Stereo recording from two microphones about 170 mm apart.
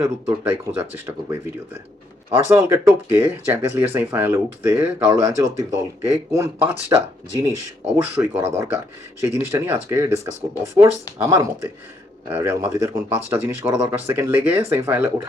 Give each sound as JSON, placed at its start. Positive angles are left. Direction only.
{"t": 0.0, "sound": "speech", "side_deg": -15}
{"t": 8.1, "sound": "speech", "side_deg": -15}
{"t": 11.2, "sound": "speech", "side_deg": -20}